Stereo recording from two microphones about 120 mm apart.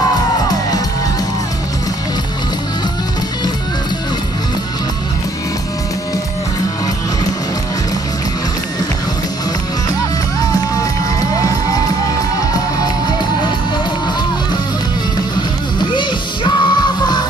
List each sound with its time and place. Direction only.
0.5 s music: 30° left (ahead or behind)
10.8 s music: 30° left (ahead or behind)
15.9 s music: 40° left (ahead or behind)